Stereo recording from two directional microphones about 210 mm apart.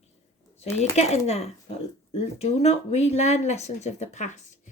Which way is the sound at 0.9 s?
30° left (ahead or behind).